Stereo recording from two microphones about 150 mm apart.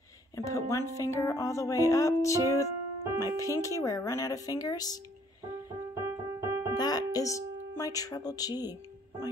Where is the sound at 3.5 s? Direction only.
20° left (ahead or behind).